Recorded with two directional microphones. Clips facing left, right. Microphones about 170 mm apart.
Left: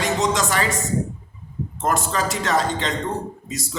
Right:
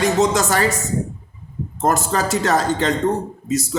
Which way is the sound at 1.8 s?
40° right (ahead or behind).